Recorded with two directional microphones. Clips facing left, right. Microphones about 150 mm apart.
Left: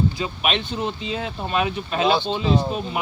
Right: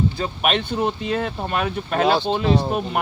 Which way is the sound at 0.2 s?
55° right (ahead or behind).